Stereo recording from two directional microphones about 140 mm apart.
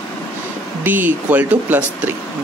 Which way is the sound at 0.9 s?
10° right (ahead or behind).